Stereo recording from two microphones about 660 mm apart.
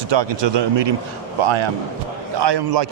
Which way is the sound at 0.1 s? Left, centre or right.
Right.